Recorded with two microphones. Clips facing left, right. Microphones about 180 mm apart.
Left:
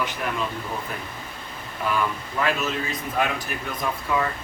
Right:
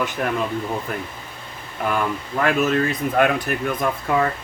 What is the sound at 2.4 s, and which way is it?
Speech, 55° right (ahead or behind).